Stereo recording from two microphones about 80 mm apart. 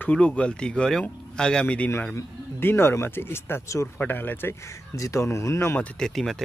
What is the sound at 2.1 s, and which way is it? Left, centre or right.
Speech, left.